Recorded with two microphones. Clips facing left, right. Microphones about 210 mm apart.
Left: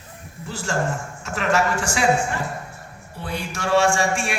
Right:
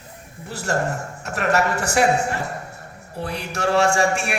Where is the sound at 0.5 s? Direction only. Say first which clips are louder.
Right 3 dB; 65° right (ahead or behind).